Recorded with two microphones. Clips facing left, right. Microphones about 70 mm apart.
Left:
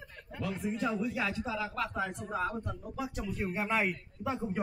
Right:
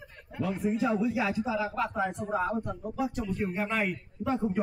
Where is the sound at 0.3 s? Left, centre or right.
Centre.